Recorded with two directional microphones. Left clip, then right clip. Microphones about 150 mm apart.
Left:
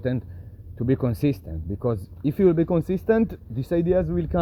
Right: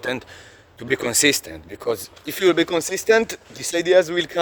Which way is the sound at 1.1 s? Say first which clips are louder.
Right 8 dB; 30° right (ahead or behind).